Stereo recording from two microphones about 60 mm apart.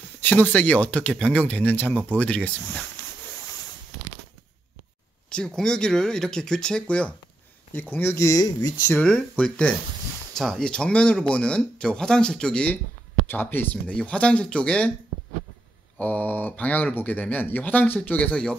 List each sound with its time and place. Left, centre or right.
0.2 s speech: left
1.4 s speech: left
5.6 s speech: centre
7.7 s speech: left
8.3 s speech: left
9.4 s speech: left
10.3 s speech: centre
13.3 s speech: left
13.8 s speech: left
16.0 s speech: left